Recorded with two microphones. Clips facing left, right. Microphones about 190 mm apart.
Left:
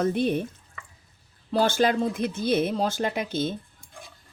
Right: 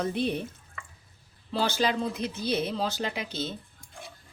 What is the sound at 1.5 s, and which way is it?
Speech, 50° left (ahead or behind).